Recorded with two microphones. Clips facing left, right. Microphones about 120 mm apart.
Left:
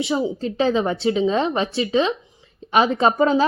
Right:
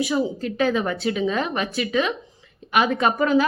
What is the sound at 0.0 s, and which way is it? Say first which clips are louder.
A woman's voice: left 1 dB; 25° left (ahead or behind).